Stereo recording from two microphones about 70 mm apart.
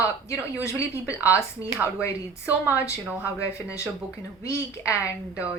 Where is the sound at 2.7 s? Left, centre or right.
Left.